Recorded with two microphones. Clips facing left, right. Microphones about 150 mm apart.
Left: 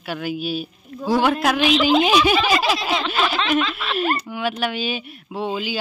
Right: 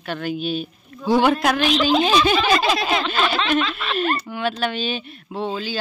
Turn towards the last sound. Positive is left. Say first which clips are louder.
# left 1 dB
turn(degrees=10)  # may be behind; listen again after turning